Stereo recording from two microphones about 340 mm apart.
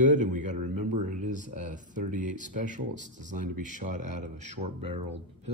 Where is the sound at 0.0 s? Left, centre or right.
Right.